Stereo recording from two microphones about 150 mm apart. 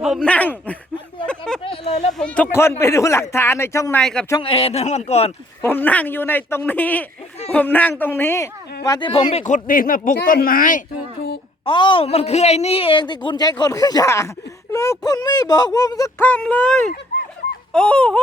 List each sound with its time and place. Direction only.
0.2 s speech: 10° left (ahead or behind)
1.2 s a sound: 5° left (ahead or behind)
1.6 s a sound: 40° left (ahead or behind)
2.1 s speech: 10° left (ahead or behind)
4.0 s speech: 5° left (ahead or behind)
4.4 s speech: 40° left (ahead or behind)
5.6 s speech: 10° left (ahead or behind); by 9.4 s 35° left (ahead or behind)
9.4 s speech: 60° left (ahead or behind)
11.6 s a woman's voice: 35° left (ahead or behind); by 18.2 s 10° left (ahead or behind)